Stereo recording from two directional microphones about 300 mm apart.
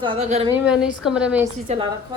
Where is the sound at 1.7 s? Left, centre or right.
Right.